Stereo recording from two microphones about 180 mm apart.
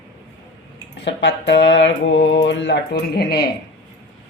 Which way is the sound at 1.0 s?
80° left.